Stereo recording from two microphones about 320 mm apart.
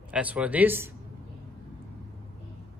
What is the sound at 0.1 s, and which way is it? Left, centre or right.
Speech, centre.